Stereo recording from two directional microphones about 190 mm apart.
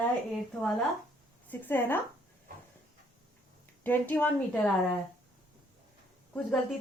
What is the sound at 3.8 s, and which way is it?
Speech, 10° left (ahead or behind).